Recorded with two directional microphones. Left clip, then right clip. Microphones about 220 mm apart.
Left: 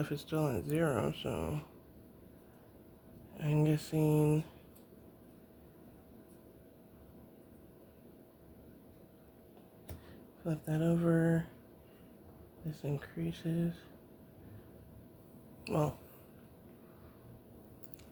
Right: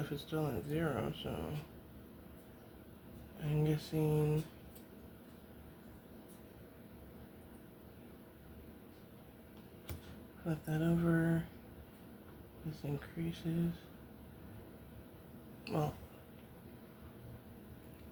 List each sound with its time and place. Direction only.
0.0 s speech: 55° left (ahead or behind)
3.3 s speech: 50° left (ahead or behind)
10.4 s speech: 45° left (ahead or behind)
12.8 s speech: 45° left (ahead or behind)
15.6 s speech: 50° left (ahead or behind)